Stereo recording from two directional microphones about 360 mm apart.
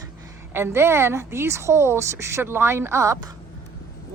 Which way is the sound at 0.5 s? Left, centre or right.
Centre.